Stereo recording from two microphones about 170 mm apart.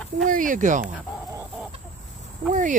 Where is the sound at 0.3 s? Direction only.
50° right (ahead or behind).